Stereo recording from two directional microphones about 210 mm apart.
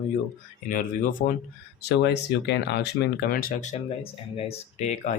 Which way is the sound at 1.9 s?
55° left (ahead or behind).